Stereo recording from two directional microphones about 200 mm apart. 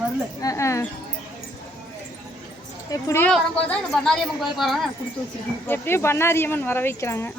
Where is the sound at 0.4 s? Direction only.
15° left (ahead or behind).